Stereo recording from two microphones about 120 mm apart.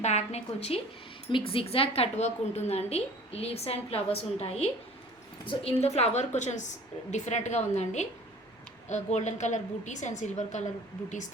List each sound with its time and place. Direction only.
0.0 s a woman's voice: 65° left (ahead or behind)
1.3 s a woman's voice: 50° left (ahead or behind); by 10.7 s 75° left (ahead or behind)